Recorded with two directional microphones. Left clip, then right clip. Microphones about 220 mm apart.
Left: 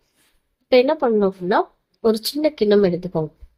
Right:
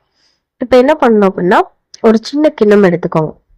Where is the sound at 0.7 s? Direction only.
30° right (ahead or behind).